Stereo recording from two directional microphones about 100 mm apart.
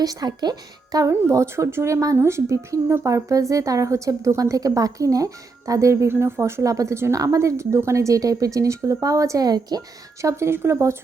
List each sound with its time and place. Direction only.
0.0 s speech: 40° right (ahead or behind)
0.9 s a woman's voice: 35° right (ahead or behind)